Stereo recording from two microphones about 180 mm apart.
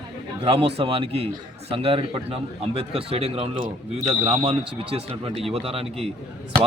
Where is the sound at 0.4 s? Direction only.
30° right (ahead or behind).